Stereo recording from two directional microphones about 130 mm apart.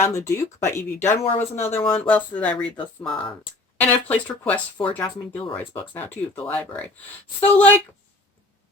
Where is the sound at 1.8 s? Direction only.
45° left (ahead or behind).